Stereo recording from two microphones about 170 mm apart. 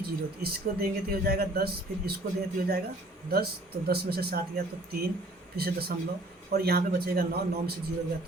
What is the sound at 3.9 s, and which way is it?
Speech, 65° right (ahead or behind).